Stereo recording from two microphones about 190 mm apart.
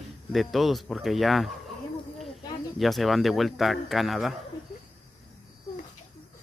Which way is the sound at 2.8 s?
Centre (ahead or behind).